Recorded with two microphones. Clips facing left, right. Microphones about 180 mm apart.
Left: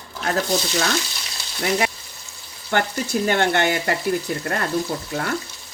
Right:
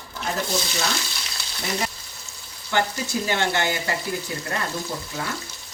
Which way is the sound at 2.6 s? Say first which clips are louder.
Left 2 dB; 55° left (ahead or behind).